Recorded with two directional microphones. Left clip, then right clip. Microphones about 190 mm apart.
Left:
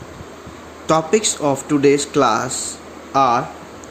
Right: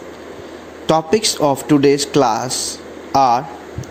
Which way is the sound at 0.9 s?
20° right (ahead or behind).